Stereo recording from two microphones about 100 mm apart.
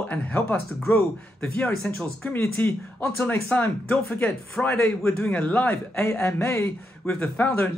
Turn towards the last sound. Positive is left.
turn(degrees=15)  # may be behind; listen again after turning